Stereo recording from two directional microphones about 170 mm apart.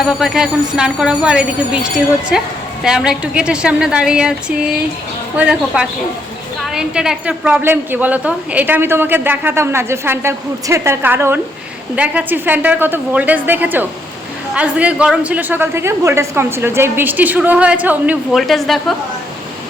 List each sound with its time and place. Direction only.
0.0 s a woman's voice: centre (ahead or behind)